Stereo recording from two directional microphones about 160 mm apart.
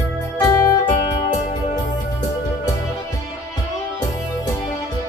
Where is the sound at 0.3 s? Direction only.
20° left (ahead or behind).